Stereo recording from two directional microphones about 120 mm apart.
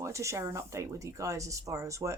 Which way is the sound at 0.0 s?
25° right (ahead or behind).